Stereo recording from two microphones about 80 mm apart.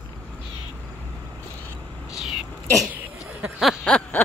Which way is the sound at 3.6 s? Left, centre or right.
Centre.